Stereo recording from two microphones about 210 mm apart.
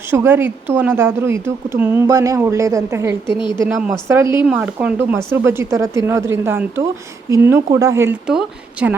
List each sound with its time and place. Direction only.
0.1 s speech: 10° right (ahead or behind)
3.2 s a woman's voice: 20° left (ahead or behind)
4.1 s speech: 10° right (ahead or behind)